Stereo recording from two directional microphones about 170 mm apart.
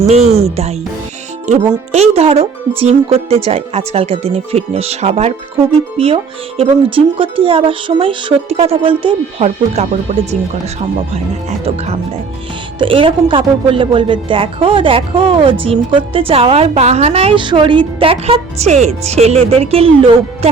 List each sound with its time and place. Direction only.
0.1 s speech: 40° right (ahead or behind)
12.8 s speech: 30° right (ahead or behind)